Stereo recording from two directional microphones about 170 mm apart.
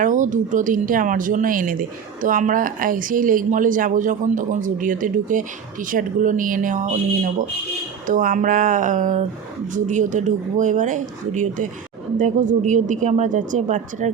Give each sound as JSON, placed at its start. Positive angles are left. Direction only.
{"t": 0.0, "sound": "speech", "side_deg": -50}